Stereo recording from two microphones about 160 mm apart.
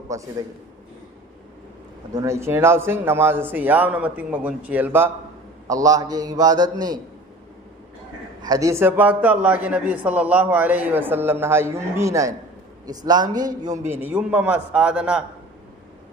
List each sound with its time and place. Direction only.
0.1 s a man's voice: 20° right (ahead or behind)
2.1 s a man's voice: 20° right (ahead or behind)
8.4 s a man's voice: 20° right (ahead or behind); by 15.2 s 5° right (ahead or behind)